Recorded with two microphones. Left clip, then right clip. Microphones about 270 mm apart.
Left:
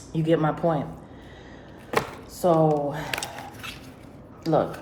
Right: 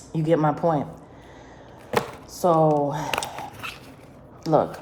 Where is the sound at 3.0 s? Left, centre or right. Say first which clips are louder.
Right 4 dB; right.